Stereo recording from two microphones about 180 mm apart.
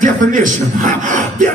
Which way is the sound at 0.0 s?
45° right (ahead or behind).